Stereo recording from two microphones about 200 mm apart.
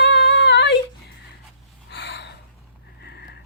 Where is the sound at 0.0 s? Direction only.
60° left (ahead or behind).